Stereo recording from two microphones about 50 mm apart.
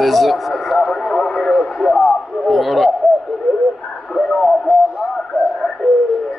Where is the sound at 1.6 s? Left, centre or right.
Centre.